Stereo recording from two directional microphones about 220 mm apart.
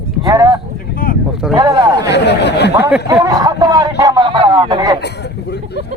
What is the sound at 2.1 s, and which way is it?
Speech, 50° left (ahead or behind).